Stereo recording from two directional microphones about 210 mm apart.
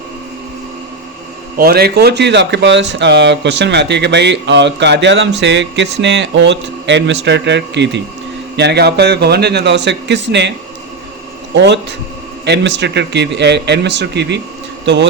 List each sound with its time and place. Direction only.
1.5 s a man's voice: 45° right (ahead or behind)
11.6 s speech: 55° right (ahead or behind)